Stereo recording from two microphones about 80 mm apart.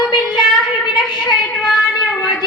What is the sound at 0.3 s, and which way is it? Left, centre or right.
Child singing, left.